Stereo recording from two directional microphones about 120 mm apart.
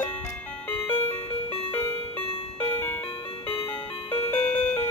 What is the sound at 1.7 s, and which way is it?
Music, 15° left (ahead or behind).